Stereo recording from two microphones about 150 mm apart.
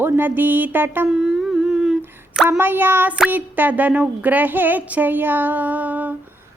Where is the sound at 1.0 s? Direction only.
5° right (ahead or behind).